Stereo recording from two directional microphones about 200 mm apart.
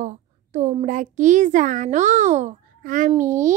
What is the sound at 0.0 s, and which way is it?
A woman's voice, 35° right (ahead or behind).